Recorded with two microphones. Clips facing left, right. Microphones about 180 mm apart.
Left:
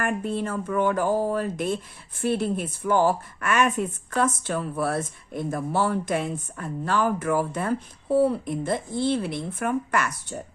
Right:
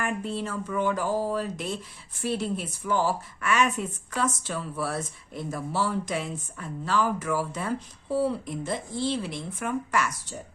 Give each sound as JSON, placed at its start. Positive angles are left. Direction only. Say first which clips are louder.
{"t": 0.0, "sound": "speech", "louder": "left 3 dB", "side_deg": 55}